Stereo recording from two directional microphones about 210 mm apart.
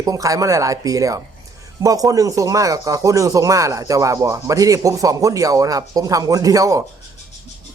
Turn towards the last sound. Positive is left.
turn(degrees=-15)  # may be behind; listen again after turning